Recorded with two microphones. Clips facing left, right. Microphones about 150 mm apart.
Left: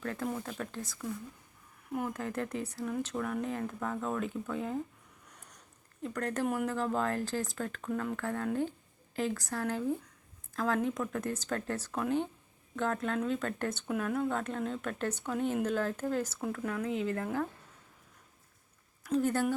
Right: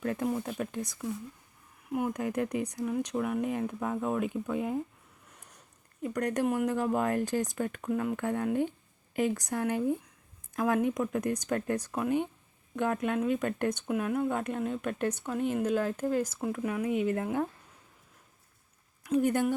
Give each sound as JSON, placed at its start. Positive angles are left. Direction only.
{"t": 0.0, "sound": "speech", "side_deg": -20}
{"t": 6.0, "sound": "speech", "side_deg": -15}
{"t": 19.1, "sound": "speech", "side_deg": -15}